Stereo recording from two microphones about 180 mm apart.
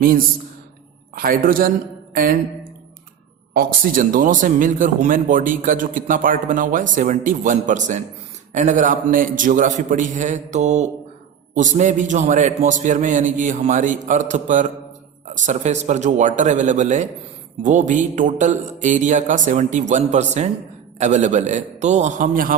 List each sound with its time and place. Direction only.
0.0 s speech: 50° right (ahead or behind)
3.5 s a man's voice: 50° right (ahead or behind)